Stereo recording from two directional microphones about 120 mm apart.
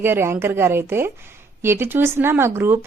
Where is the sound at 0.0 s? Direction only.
20° right (ahead or behind).